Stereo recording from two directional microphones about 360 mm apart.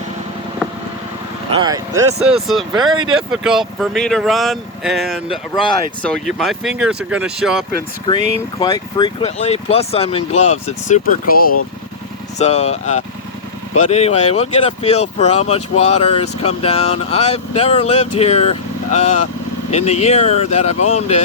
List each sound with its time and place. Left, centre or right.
1.5 s speech: centre
3.4 s speech: centre
8.1 s speech: centre